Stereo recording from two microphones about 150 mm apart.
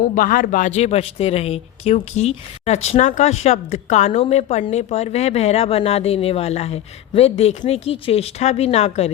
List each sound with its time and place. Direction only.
0.1 s speech: 65° left (ahead or behind); by 9.0 s 45° left (ahead or behind)